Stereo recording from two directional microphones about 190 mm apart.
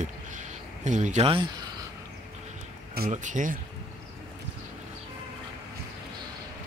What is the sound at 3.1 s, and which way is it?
Speech, 40° right (ahead or behind).